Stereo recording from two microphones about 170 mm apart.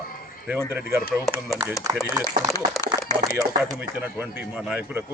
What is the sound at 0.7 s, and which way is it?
Speech, 15° right (ahead or behind).